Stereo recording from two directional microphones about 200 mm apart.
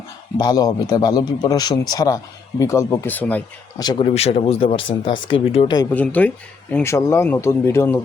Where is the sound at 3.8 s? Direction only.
25° left (ahead or behind).